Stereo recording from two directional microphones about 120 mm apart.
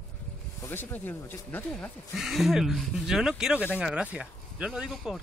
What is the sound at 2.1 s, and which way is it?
Speech, centre (ahead or behind).